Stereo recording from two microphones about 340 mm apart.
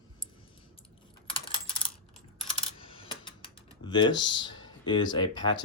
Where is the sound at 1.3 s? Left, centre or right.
Centre.